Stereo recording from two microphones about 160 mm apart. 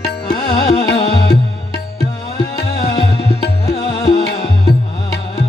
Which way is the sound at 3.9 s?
35° left (ahead or behind).